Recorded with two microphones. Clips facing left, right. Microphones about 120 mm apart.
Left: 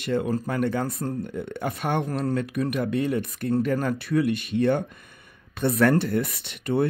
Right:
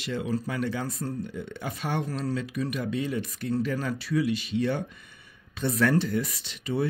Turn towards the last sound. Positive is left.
turn(degrees=60)  # may be behind; listen again after turning